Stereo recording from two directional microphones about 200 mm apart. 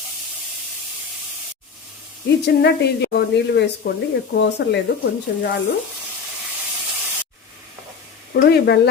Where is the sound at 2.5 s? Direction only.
55° left (ahead or behind).